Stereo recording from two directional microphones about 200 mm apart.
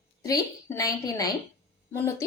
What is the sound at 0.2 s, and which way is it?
A woman's voice, 15° left (ahead or behind).